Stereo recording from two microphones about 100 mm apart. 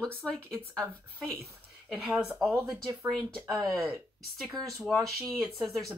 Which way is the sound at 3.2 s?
10° left (ahead or behind).